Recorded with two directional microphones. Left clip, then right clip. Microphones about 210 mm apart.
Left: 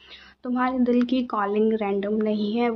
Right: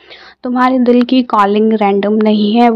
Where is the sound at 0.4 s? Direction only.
40° right (ahead or behind).